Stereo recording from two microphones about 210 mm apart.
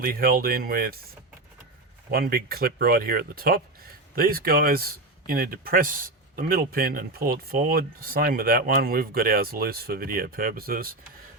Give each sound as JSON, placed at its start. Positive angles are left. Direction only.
{"t": 0.0, "sound": "speech", "side_deg": -45}
{"t": 2.0, "sound": "speech", "side_deg": -45}